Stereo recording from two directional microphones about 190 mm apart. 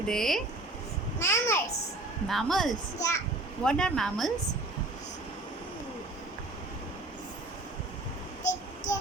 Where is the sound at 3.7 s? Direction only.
5° left (ahead or behind).